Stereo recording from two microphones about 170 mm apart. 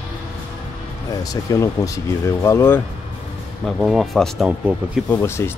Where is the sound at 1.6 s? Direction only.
20° left (ahead or behind).